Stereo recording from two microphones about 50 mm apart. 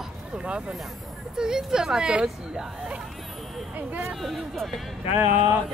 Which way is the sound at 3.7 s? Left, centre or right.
Right.